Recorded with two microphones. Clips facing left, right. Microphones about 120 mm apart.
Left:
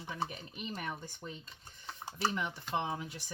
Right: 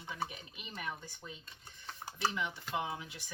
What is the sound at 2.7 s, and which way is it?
Speech, 35° left (ahead or behind).